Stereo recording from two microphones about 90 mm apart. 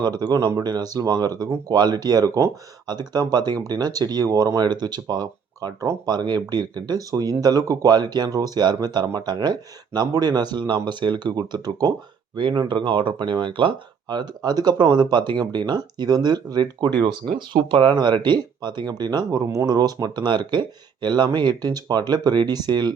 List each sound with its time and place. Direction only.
0.0 s speech: 50° right (ahead or behind)